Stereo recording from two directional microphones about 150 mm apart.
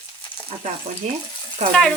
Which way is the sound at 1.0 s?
50° right (ahead or behind).